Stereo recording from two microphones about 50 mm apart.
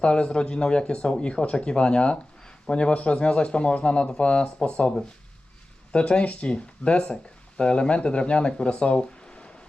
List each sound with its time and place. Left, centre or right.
0.0 s a man's voice: centre